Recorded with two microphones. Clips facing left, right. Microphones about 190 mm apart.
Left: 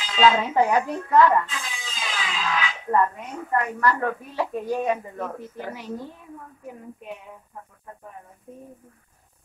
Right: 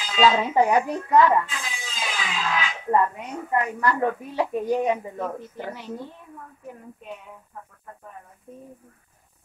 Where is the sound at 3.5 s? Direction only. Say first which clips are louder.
Left 1 dB; 15° right (ahead or behind).